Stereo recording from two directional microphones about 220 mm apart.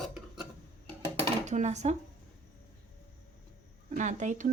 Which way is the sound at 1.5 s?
30° right (ahead or behind).